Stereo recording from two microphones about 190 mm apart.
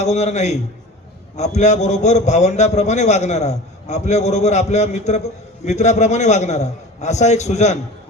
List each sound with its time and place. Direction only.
0.0 s a man's voice: 35° left (ahead or behind)